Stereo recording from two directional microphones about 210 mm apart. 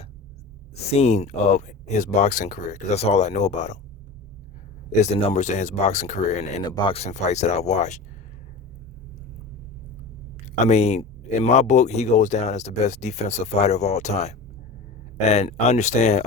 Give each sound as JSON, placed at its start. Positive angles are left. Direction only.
{"t": 0.9, "sound": "speech", "side_deg": 30}
{"t": 4.9, "sound": "speech", "side_deg": 30}
{"t": 6.6, "sound": "speech", "side_deg": 20}
{"t": 10.4, "sound": "speech", "side_deg": 30}